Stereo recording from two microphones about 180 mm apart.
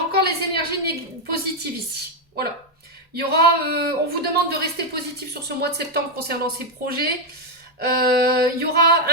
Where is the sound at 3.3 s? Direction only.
60° right (ahead or behind).